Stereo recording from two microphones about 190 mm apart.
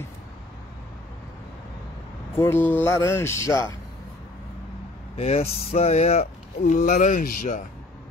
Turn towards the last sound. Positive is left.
turn(degrees=45)  # may be behind; listen again after turning